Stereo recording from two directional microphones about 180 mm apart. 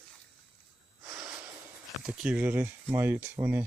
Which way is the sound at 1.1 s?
10° right (ahead or behind).